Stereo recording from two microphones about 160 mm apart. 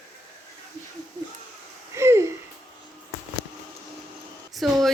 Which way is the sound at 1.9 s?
15° right (ahead or behind).